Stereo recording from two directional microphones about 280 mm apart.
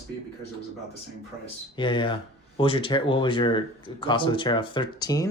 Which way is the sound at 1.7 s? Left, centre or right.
Centre.